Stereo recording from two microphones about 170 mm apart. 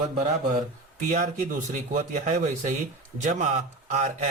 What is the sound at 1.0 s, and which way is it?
Speech, 50° right (ahead or behind).